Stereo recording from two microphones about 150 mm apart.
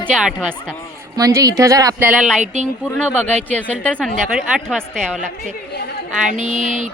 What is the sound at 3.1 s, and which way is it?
Speech, 10° left (ahead or behind).